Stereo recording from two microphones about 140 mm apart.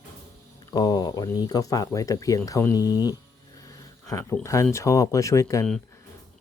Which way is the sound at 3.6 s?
20° left (ahead or behind).